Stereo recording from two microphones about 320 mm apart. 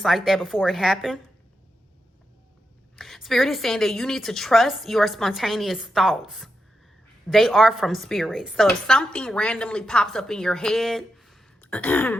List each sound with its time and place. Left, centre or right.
0.0 s a woman's voice: centre
2.9 s a woman's voice: centre